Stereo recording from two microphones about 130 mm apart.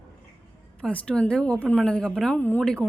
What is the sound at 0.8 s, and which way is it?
A woman's voice, 10° left (ahead or behind).